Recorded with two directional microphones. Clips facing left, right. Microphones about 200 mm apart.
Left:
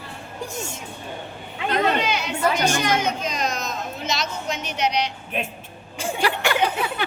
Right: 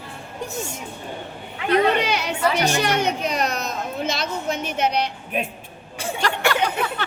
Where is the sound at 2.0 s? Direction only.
60° right (ahead or behind).